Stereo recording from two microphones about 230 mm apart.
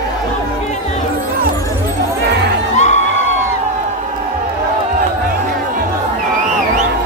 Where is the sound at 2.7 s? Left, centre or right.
Left.